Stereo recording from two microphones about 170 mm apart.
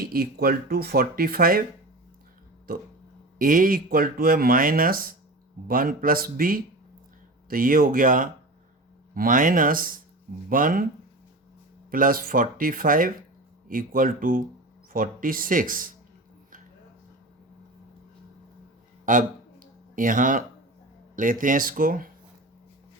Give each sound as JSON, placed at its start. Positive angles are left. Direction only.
{"t": 0.0, "sound": "speech", "side_deg": -60}
{"t": 3.3, "sound": "speech", "side_deg": -55}
{"t": 11.9, "sound": "speech", "side_deg": -55}
{"t": 19.0, "sound": "a sound", "side_deg": -50}
{"t": 21.2, "sound": "speech", "side_deg": -50}